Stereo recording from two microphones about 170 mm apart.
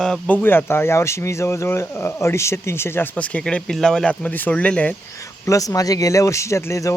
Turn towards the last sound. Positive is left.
turn(degrees=20)  # may be behind; listen again after turning